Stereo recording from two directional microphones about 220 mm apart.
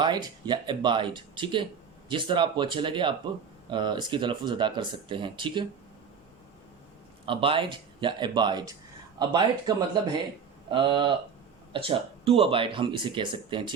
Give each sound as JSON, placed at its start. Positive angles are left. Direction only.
{"t": 0.0, "sound": "speech", "side_deg": -20}
{"t": 7.3, "sound": "speech", "side_deg": -25}